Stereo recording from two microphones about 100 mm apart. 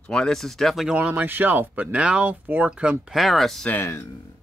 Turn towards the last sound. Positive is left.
turn(degrees=25)  # may be behind; listen again after turning